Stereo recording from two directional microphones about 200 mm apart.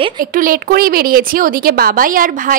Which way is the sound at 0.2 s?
45° right (ahead or behind).